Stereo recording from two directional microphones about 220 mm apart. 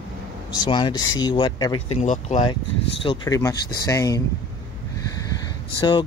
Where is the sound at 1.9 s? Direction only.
30° left (ahead or behind).